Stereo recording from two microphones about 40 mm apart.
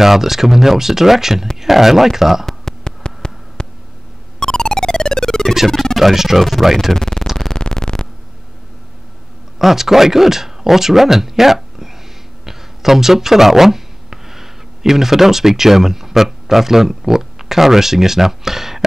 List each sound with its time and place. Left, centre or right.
0.0 s speech: centre
2.4 s a sound: centre
4.4 s music: centre
5.9 s speech: centre
6.9 s a sound: centre
7.3 s music: centre
9.6 s speech: centre